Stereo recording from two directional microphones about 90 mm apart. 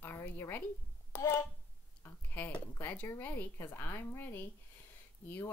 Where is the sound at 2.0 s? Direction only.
25° left (ahead or behind).